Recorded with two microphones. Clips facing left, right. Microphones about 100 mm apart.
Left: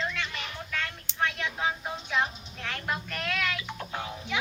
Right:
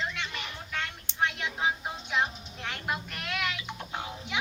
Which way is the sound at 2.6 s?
20° right (ahead or behind).